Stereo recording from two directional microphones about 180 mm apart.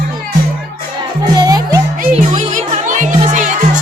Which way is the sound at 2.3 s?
45° right (ahead or behind).